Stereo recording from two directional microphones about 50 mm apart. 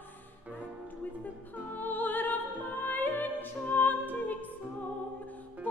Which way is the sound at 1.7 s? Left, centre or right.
Left.